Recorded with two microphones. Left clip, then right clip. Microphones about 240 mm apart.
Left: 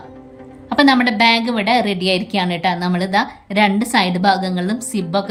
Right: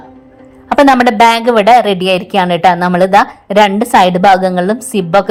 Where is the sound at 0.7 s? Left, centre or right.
Right.